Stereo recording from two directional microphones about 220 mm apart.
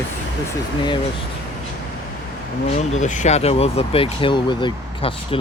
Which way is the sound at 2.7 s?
30° left (ahead or behind).